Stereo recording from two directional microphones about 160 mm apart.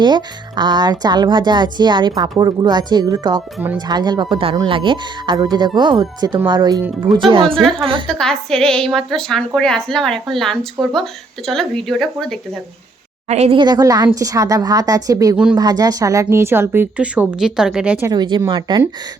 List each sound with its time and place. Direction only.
0.0 s a woman's voice: 30° right (ahead or behind)
7.6 s a woman's voice: centre (ahead or behind)
13.2 s speech: 40° right (ahead or behind)
13.6 s a woman's voice: 25° right (ahead or behind); by 18.1 s 10° right (ahead or behind)
18.1 s a woman's voice: 25° right (ahead or behind)